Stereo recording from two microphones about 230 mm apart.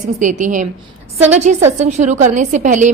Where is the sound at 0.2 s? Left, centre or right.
Right.